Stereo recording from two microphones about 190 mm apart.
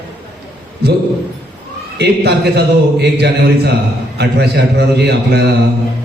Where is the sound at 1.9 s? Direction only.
60° right (ahead or behind).